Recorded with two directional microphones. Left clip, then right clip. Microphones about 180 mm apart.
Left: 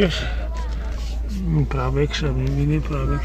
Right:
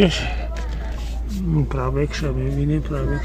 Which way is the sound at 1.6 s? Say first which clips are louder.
Left 1 dB; 5° left (ahead or behind).